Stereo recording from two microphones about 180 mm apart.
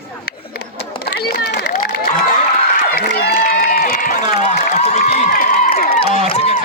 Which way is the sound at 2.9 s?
55° left (ahead or behind).